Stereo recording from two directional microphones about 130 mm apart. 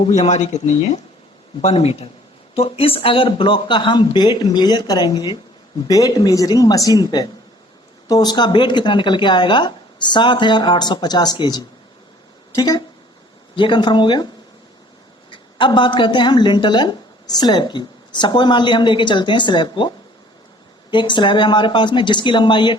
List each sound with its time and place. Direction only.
0.0 s a woman's voice: 60° left (ahead or behind); by 12.8 s 25° left (ahead or behind)
13.6 s a woman's voice: 35° left (ahead or behind)
15.3 s a woman's voice: 40° left (ahead or behind)
20.9 s a woman's voice: 35° left (ahead or behind)